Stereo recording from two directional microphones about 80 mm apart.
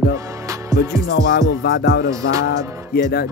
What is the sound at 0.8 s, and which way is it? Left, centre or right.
Music, right.